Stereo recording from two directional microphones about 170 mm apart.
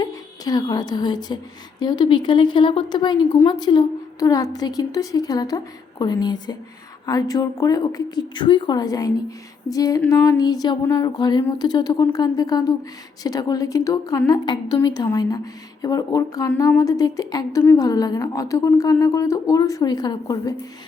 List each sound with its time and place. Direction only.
0.0 s a woman's voice: 20° left (ahead or behind)